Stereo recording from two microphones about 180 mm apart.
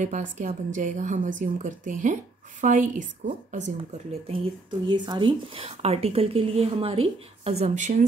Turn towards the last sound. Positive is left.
turn(degrees=-40)  # may be behind; listen again after turning